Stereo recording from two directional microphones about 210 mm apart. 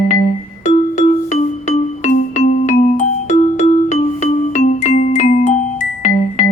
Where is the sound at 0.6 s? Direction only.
35° left (ahead or behind).